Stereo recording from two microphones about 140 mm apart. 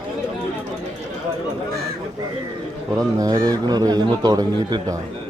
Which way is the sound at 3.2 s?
25° right (ahead or behind).